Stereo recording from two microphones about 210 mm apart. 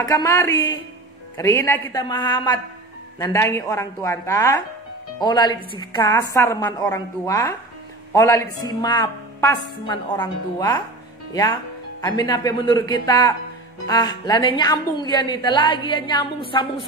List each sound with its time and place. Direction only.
0.0 s a woman's voice: 15° left (ahead or behind)
12.0 s speech: 20° left (ahead or behind)